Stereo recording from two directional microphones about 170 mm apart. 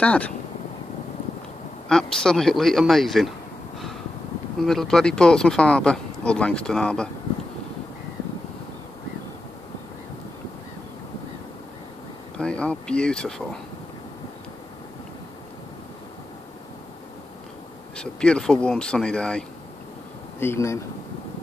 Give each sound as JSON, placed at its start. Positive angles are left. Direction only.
{"t": 0.0, "sound": "speech", "side_deg": 10}
{"t": 1.9, "sound": "speech", "side_deg": 5}
{"t": 4.6, "sound": "speech", "side_deg": 0}
{"t": 12.4, "sound": "speech", "side_deg": 5}
{"t": 17.9, "sound": "speech", "side_deg": 5}